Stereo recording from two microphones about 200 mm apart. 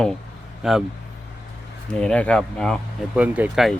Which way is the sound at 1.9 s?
5° left (ahead or behind).